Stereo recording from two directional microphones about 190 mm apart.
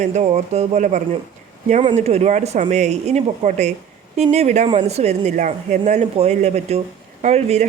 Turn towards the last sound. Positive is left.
turn(degrees=-35)  # may be behind; listen again after turning